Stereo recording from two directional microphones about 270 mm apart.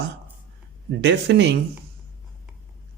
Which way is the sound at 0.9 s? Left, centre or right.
Right.